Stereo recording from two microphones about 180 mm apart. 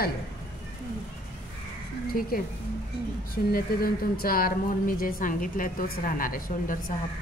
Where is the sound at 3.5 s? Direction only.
55° left (ahead or behind).